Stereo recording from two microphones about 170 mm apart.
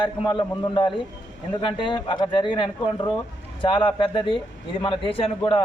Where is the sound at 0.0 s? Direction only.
25° left (ahead or behind).